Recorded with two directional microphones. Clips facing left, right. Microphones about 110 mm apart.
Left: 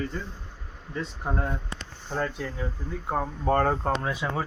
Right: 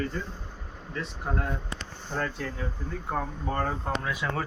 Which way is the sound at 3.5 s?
50° left (ahead or behind).